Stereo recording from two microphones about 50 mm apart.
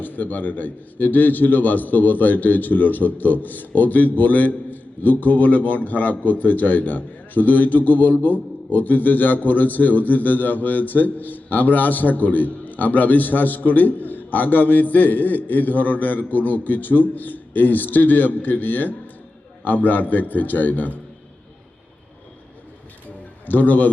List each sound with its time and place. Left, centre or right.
0.0 s a man's voice: left
23.5 s a man's voice: left